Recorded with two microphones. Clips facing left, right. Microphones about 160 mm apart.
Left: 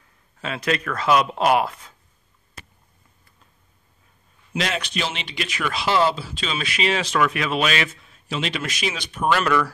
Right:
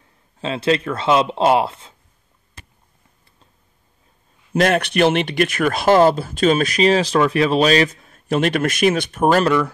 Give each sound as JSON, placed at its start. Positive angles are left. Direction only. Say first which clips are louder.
{"t": 0.4, "sound": "speech", "louder": "right 6 dB", "side_deg": -30}
{"t": 4.6, "sound": "speech", "louder": "right 10 dB", "side_deg": -55}